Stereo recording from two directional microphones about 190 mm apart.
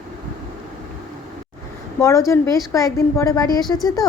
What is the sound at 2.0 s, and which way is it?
A woman's voice, 15° left (ahead or behind).